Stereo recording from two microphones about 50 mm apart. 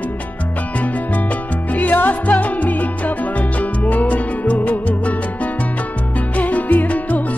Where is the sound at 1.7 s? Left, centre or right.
Left.